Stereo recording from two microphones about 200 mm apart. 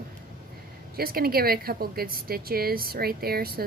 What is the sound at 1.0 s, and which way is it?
Speech, 50° right (ahead or behind).